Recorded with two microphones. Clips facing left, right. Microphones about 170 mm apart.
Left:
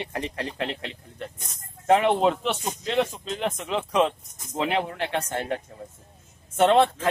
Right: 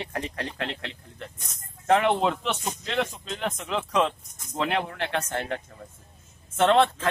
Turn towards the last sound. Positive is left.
turn(degrees=15)  # may be behind; listen again after turning